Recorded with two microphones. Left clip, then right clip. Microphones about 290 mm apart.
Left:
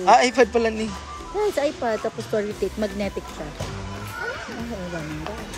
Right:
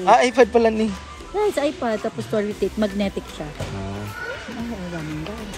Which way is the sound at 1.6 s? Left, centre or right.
Right.